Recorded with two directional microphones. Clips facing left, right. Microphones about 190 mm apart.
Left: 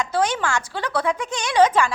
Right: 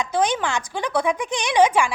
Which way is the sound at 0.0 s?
15° right (ahead or behind).